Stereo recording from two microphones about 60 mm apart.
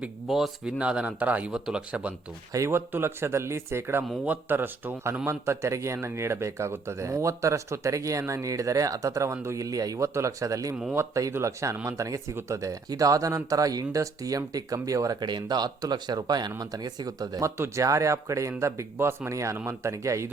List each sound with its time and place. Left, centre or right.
0.3 s speech: centre
0.6 s speech: centre
1.5 s speech: centre
2.6 s speech: right
5.2 s speech: right
9.6 s speech: right
15.8 s speech: right
17.7 s speech: right
18.9 s speech: right
19.3 s speech: right